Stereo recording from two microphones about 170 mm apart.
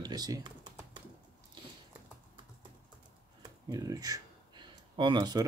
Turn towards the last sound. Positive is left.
turn(degrees=-25)  # may be behind; listen again after turning